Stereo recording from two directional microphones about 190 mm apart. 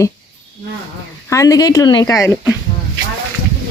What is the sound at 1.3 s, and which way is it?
Speech, 15° left (ahead or behind).